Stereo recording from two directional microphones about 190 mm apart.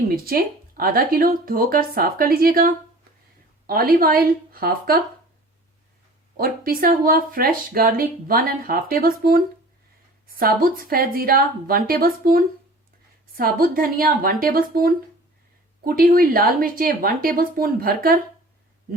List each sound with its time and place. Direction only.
0.1 s speech: 50° right (ahead or behind)
6.3 s speech: 50° right (ahead or behind)